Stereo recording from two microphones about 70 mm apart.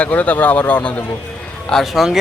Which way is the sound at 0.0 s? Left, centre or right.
Left.